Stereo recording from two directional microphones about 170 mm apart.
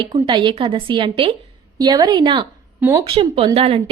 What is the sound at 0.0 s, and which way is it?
A woman's voice, 25° right (ahead or behind).